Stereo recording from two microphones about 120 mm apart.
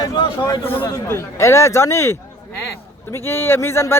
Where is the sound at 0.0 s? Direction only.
35° left (ahead or behind).